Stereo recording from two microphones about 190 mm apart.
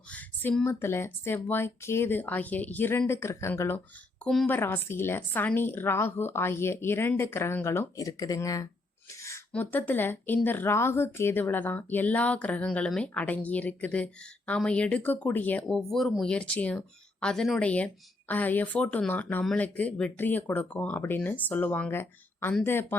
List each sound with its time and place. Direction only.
0.1 s speech: 5° left (ahead or behind)